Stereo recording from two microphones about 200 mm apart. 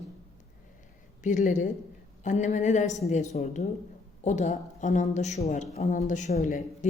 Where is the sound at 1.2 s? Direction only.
40° left (ahead or behind).